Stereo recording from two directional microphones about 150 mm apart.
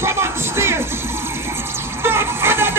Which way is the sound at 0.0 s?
15° right (ahead or behind).